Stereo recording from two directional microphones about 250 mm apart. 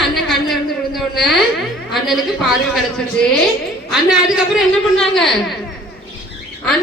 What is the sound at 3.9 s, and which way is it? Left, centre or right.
A woman's voice, centre.